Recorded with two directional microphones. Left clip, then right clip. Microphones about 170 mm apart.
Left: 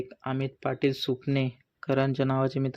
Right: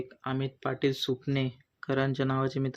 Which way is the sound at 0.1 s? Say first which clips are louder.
Left 2 dB; 25° left (ahead or behind).